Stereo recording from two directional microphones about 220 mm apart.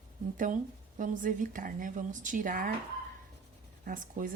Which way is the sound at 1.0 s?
35° right (ahead or behind).